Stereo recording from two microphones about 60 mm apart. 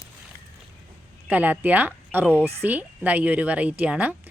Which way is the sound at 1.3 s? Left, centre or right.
Right.